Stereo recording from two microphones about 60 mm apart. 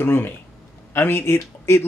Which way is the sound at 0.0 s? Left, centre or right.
Left.